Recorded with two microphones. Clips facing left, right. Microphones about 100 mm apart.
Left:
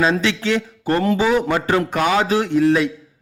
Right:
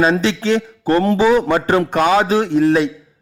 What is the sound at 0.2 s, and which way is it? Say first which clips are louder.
A man's voice: right 3 dB; 30° right (ahead or behind).